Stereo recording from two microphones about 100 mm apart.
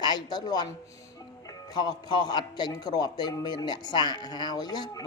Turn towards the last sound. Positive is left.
turn(degrees=40)  # may be behind; listen again after turning